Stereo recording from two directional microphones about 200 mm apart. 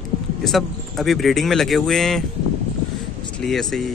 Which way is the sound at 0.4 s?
Centre (ahead or behind).